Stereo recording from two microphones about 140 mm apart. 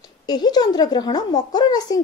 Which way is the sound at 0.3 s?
30° left (ahead or behind).